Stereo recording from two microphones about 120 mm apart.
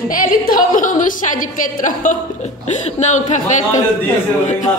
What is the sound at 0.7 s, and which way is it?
A woman's voice, 90° left.